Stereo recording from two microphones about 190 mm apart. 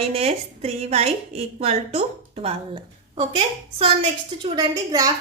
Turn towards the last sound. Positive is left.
turn(degrees=-20)  # may be behind; listen again after turning